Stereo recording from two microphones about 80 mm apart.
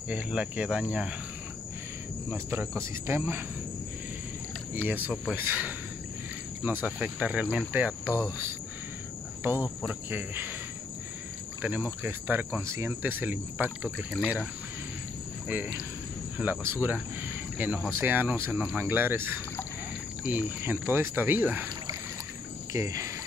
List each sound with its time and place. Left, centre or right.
0.1 s cricket: centre
2.3 s cricket: right
4.8 s cricket: right
11.6 s cricket: centre
14.2 s cricket: centre
15.4 s speech: centre
16.6 s cricket: right
22.7 s cricket: right